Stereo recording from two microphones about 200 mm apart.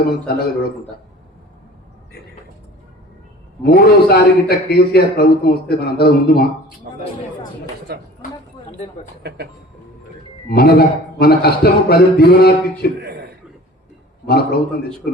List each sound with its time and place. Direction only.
0.0 s a man's voice: 50° left (ahead or behind)
3.6 s a man's voice: 50° left (ahead or behind)
7.9 s speech: 55° right (ahead or behind)
10.5 s a man's voice: 50° left (ahead or behind)
13.0 s chuckle: 55° right (ahead or behind)
14.3 s a man's voice: 50° left (ahead or behind)